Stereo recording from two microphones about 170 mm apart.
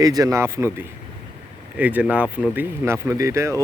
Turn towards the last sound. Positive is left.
turn(degrees=-15)  # may be behind; listen again after turning